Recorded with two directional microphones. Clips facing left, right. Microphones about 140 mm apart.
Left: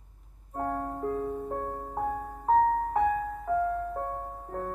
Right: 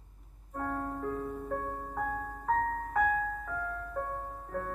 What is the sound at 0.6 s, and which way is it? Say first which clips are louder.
Music: left 3 dB; 30° left (ahead or behind).